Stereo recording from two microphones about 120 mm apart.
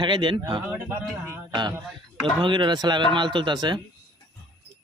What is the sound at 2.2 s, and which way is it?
Speech, 45° right (ahead or behind).